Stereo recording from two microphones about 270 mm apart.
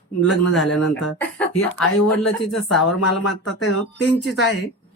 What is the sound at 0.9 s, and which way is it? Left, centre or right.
Speech, centre.